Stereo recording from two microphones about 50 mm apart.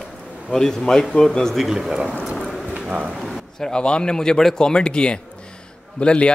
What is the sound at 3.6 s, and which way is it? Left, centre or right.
A man's voice, centre.